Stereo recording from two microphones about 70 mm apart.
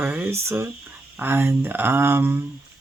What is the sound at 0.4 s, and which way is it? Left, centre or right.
Speech, right.